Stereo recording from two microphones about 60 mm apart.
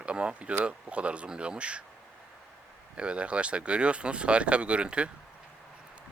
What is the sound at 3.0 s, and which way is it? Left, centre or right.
Speech, centre.